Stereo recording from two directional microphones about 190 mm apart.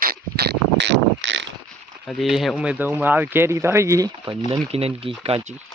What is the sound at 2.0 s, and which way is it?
Speech, centre (ahead or behind).